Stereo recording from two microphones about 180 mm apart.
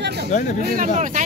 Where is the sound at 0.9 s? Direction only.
40° right (ahead or behind).